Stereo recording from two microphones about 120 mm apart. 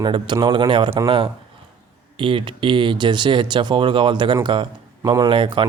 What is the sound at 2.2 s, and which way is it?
Speech, 45° right (ahead or behind).